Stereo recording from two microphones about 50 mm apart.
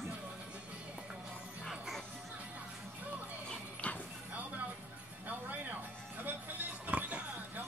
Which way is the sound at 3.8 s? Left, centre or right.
Left.